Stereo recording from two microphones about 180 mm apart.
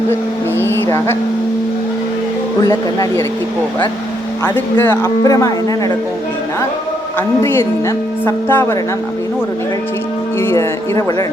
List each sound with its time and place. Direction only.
0.6 s a sound: 15° left (ahead or behind)
2.6 s speech: 20° left (ahead or behind)
4.4 s speech: 15° left (ahead or behind)
7.2 s speech: 15° left (ahead or behind)
10.4 s speech: 15° left (ahead or behind)